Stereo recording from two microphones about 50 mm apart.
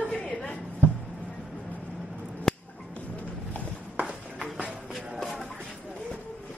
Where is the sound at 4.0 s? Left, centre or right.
Right.